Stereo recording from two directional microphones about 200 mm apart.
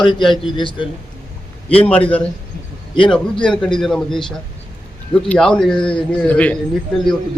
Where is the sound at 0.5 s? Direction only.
25° left (ahead or behind).